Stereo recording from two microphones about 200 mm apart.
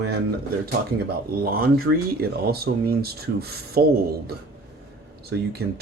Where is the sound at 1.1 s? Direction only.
45° right (ahead or behind).